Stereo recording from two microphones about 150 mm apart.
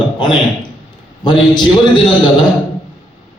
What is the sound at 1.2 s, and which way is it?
Speech, 30° left (ahead or behind).